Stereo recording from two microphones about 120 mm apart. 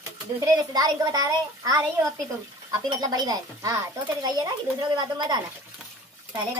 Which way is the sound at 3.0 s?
35° right (ahead or behind).